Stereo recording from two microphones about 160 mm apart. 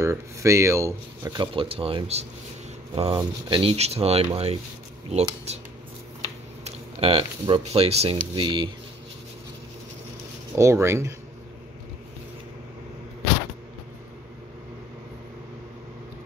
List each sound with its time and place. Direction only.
0.0 s speech: 20° right (ahead or behind)
10.5 s speech: 15° right (ahead or behind)